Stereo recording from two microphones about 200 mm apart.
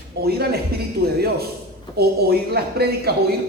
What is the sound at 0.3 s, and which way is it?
Speech, 50° right (ahead or behind).